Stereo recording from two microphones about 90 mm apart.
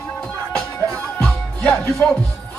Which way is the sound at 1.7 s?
5° left (ahead or behind).